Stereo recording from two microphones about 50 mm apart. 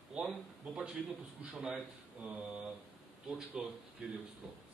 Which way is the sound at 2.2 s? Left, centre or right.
Right.